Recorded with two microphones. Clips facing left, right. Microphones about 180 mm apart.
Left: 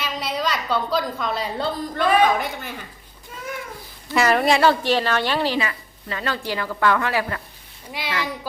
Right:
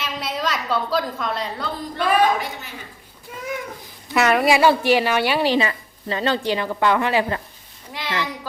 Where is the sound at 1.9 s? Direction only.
55° left (ahead or behind).